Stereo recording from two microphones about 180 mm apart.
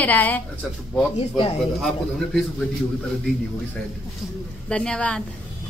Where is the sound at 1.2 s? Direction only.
35° left (ahead or behind).